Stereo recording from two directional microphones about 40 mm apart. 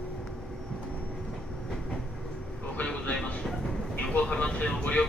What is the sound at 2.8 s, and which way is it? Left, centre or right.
Vehicle, left.